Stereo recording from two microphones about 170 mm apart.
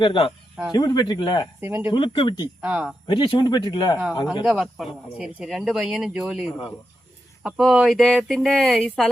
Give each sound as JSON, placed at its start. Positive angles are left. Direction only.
{"t": 0.0, "sound": "speech", "side_deg": 30}
{"t": 1.6, "sound": "speech", "side_deg": -15}
{"t": 1.9, "sound": "speech", "side_deg": 30}
{"t": 2.6, "sound": "speech", "side_deg": -5}
{"t": 3.1, "sound": "speech", "side_deg": 25}
{"t": 4.4, "sound": "speech", "side_deg": 0}